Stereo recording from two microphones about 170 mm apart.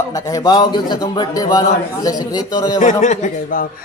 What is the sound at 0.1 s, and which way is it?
A man's voice, 20° left (ahead or behind).